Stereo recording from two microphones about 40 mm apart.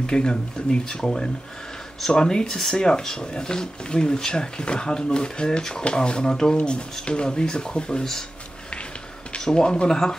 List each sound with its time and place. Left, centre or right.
0.0 s speech: centre
9.4 s speech: centre